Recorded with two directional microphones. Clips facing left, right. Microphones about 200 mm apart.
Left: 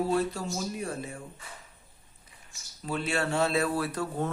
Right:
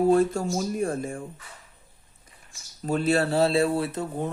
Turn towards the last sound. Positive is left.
turn(degrees=-20)  # may be behind; listen again after turning